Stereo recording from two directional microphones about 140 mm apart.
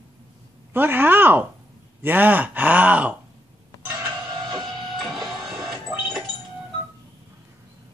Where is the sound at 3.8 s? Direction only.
15° right (ahead or behind).